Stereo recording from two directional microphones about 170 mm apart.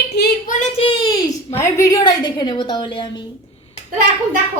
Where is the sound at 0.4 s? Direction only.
50° left (ahead or behind).